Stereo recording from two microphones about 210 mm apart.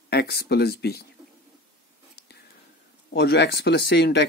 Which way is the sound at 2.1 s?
50° left (ahead or behind).